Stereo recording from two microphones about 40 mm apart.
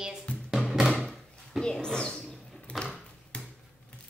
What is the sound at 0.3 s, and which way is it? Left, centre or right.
Music, left.